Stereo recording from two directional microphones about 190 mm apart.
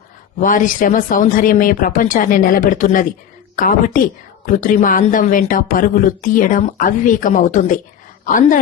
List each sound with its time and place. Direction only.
0.3 s speech: 45° left (ahead or behind)